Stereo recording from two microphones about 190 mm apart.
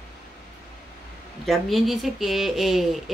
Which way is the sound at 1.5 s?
Centre (ahead or behind).